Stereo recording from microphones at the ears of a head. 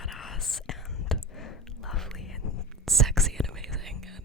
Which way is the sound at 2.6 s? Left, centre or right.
Centre.